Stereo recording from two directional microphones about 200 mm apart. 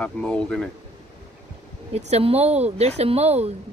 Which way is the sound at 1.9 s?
30° right (ahead or behind).